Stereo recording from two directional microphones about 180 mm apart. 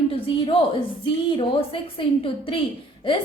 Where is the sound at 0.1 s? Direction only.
30° left (ahead or behind).